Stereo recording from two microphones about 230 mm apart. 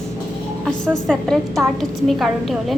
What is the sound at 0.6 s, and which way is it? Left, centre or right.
A woman's voice, centre.